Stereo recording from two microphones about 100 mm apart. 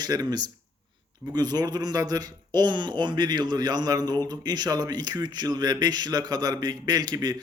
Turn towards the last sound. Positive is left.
turn(degrees=-40)  # may be behind; listen again after turning